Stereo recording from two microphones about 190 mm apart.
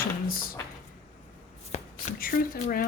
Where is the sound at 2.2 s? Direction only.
50° left (ahead or behind).